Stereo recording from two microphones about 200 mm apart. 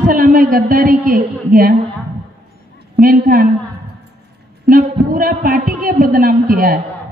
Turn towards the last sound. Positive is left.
turn(degrees=-45)  # may be behind; listen again after turning